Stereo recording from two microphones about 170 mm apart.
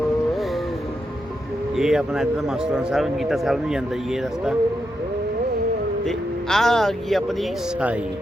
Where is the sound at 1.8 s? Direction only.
5° right (ahead or behind).